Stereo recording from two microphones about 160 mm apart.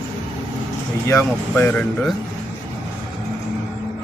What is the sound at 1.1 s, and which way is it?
A man's voice, 15° left (ahead or behind).